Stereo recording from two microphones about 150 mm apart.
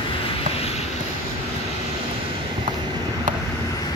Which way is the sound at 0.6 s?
45° left (ahead or behind).